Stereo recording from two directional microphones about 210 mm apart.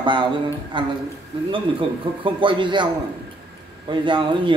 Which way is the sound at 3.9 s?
25° right (ahead or behind).